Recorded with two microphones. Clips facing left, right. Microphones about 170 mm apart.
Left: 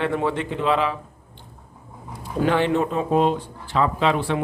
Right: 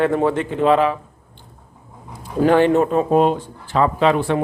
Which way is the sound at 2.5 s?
45° right (ahead or behind).